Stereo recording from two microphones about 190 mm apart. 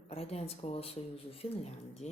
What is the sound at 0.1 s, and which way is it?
Speech, 30° left (ahead or behind).